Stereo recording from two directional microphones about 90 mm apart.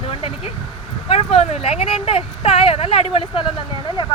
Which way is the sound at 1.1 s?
90° left.